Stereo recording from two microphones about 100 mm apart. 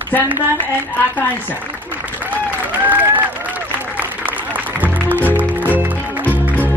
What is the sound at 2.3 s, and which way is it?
Applause, 15° right (ahead or behind).